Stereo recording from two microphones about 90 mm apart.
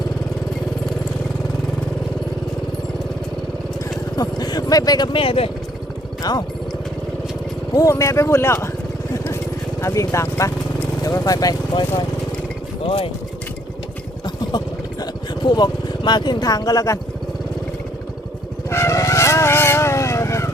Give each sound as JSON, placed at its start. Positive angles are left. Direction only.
{"t": 4.2, "sound": "vehicle", "side_deg": 50}
{"t": 5.1, "sound": "speech", "side_deg": 90}
{"t": 6.3, "sound": "speech", "side_deg": 45}
{"t": 7.8, "sound": "speech", "side_deg": 35}
{"t": 9.8, "sound": "speech", "side_deg": 35}
{"t": 12.8, "sound": "speech", "side_deg": 90}
{"t": 14.3, "sound": "vehicle", "side_deg": 50}
{"t": 18.7, "sound": "vehicle", "side_deg": 30}